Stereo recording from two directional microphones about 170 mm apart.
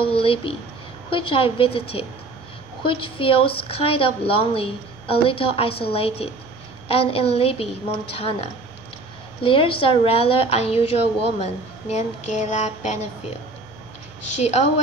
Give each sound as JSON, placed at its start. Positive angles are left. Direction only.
{"t": 0.0, "sound": "a woman's voice", "side_deg": 35}
{"t": 9.4, "sound": "a woman's voice", "side_deg": 30}